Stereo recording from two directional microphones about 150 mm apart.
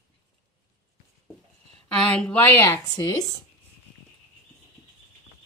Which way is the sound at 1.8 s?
5° left (ahead or behind).